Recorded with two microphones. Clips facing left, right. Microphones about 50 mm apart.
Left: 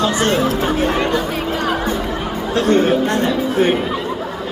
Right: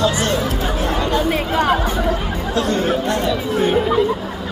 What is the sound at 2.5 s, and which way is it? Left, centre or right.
A man's voice, left.